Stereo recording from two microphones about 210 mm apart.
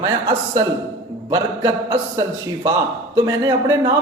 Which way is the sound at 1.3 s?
15° right (ahead or behind).